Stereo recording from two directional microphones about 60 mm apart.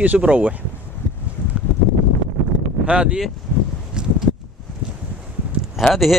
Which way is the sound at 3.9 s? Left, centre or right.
Centre.